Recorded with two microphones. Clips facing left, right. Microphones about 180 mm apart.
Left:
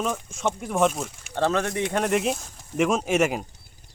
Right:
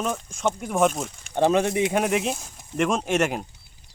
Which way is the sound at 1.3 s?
15° right (ahead or behind).